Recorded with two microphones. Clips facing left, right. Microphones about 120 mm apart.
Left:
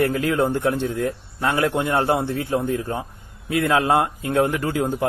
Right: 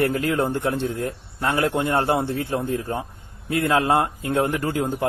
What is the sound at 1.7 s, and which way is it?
Speech, 30° right (ahead or behind).